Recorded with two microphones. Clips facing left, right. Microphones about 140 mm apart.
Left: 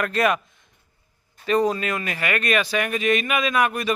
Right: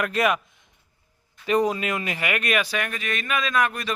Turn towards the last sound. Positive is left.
turn(degrees=5)  # may be behind; listen again after turning